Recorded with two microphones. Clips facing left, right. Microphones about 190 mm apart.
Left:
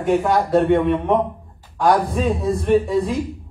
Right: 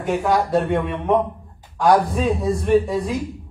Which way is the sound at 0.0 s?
Centre (ahead or behind).